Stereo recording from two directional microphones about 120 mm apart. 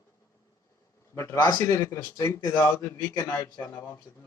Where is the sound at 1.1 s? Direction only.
25° left (ahead or behind).